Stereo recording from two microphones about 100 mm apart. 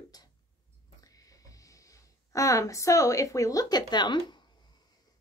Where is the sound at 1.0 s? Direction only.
35° left (ahead or behind).